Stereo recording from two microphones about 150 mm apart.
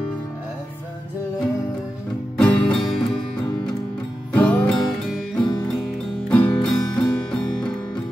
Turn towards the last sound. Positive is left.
turn(degrees=5)  # may be behind; listen again after turning